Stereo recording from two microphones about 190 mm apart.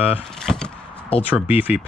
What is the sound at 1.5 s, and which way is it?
Speech, 10° right (ahead or behind).